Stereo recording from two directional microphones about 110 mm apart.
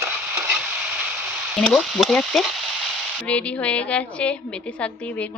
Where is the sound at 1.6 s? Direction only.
5° left (ahead or behind).